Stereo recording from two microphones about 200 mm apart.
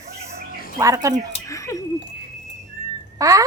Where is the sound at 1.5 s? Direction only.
15° left (ahead or behind).